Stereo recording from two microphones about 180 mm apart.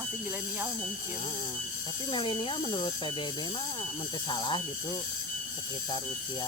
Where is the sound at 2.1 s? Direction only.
25° left (ahead or behind).